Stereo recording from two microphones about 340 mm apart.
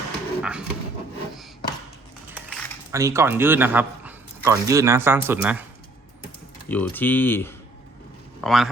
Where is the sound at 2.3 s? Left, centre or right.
Centre.